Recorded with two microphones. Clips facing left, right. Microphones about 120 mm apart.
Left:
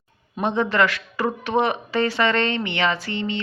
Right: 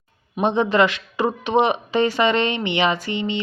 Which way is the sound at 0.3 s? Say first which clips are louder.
Right 3 dB; 20° right (ahead or behind).